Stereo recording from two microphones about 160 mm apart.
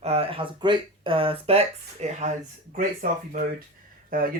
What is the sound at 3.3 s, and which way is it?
Speech, 60° right (ahead or behind).